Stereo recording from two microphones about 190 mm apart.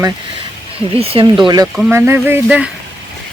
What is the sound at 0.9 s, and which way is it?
Speech, 30° right (ahead or behind).